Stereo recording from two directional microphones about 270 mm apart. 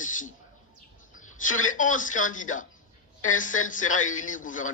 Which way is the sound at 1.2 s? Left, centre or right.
Left.